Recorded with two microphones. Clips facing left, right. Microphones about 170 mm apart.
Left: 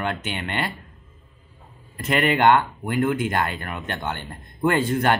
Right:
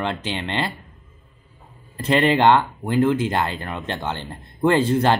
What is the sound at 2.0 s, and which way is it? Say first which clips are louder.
Speech: right 3 dB; 30° right (ahead or behind).